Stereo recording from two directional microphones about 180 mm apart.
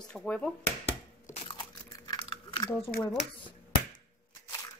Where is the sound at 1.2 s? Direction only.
35° left (ahead or behind).